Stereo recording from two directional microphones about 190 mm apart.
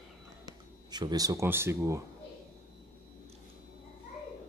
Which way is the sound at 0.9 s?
20° right (ahead or behind).